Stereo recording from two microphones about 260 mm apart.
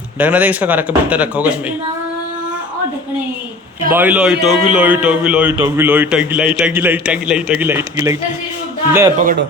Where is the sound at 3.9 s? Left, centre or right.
Centre.